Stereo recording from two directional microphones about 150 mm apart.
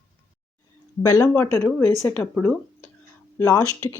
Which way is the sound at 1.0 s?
25° left (ahead or behind).